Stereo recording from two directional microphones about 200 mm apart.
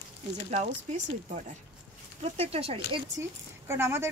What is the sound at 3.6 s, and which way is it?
Speech, 15° right (ahead or behind).